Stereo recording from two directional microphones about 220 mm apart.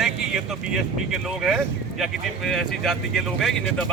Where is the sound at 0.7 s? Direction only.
Centre (ahead or behind).